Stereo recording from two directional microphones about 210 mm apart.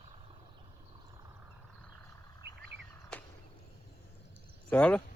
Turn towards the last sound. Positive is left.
turn(degrees=5)  # may be behind; listen again after turning